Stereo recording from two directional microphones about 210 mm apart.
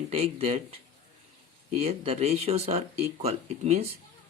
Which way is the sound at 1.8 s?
30° right (ahead or behind).